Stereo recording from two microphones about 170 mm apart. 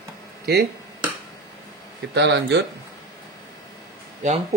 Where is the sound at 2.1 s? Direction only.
90° right.